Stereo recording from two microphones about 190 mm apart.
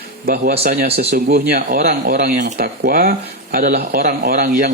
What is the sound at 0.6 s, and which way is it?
Speech, 50° right (ahead or behind).